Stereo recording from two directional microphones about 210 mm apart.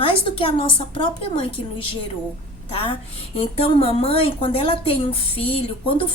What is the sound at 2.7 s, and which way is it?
A woman's voice, 25° left (ahead or behind).